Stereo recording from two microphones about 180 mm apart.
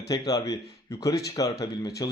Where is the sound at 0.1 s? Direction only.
20° left (ahead or behind).